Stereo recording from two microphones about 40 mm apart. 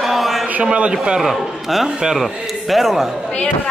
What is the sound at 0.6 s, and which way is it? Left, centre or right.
Speech, right.